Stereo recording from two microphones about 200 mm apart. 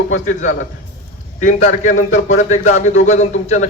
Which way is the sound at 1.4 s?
35° left (ahead or behind).